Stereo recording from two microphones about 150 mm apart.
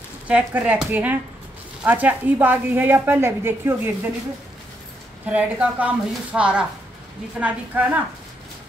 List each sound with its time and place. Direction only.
0.5 s a woman's voice: 10° right (ahead or behind)
5.2 s a woman's voice: 10° right (ahead or behind)